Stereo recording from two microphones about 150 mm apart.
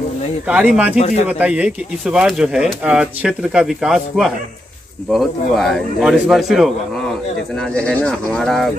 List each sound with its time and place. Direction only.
0.5 s speech: 10° right (ahead or behind)
0.9 s speech: 45° left (ahead or behind)
1.2 s speech: 10° right (ahead or behind)